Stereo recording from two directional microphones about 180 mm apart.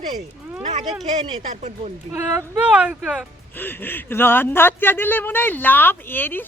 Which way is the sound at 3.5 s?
10° left (ahead or behind).